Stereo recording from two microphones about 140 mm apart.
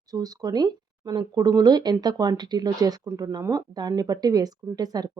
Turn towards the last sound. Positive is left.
turn(degrees=-30)  # may be behind; listen again after turning